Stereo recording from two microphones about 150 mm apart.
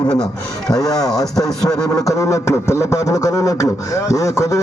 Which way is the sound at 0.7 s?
25° left (ahead or behind).